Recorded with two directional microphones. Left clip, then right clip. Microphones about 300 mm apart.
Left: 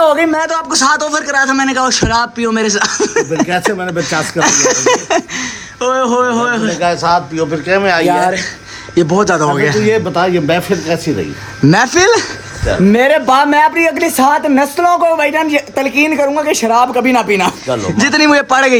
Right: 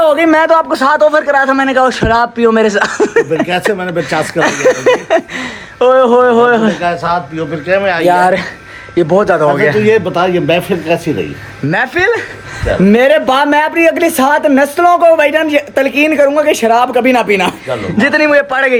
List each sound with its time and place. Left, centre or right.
0.0 s a sound: centre
0.7 s a man's voice: centre
6.8 s a man's voice: left
9.0 s a man's voice: centre